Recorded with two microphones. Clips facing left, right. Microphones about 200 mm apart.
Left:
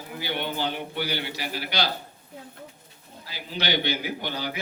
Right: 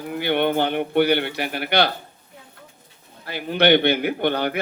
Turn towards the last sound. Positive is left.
turn(degrees=-60)  # may be behind; listen again after turning